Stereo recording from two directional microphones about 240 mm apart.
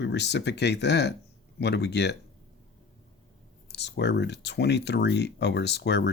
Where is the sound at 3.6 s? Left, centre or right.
Left.